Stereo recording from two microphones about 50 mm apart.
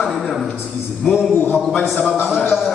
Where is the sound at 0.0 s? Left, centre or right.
Centre.